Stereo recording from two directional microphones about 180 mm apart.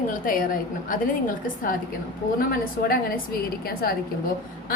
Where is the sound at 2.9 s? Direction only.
55° left (ahead or behind).